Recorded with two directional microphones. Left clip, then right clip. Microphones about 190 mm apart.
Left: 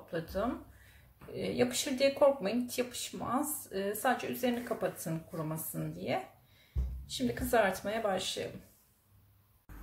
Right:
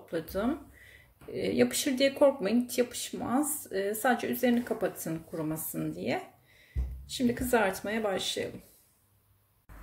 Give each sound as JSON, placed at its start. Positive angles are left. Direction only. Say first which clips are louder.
{"t": 0.1, "sound": "speech", "louder": "right 3 dB", "side_deg": -40}